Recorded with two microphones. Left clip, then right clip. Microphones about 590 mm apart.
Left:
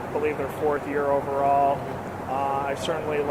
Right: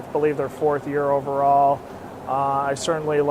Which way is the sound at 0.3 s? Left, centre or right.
Right.